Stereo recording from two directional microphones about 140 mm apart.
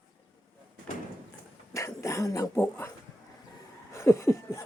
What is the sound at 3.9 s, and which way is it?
Laughter, 20° left (ahead or behind).